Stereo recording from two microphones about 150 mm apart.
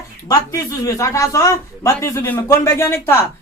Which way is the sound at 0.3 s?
25° left (ahead or behind).